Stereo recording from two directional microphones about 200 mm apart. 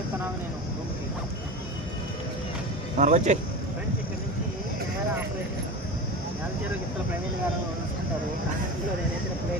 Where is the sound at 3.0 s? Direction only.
40° right (ahead or behind).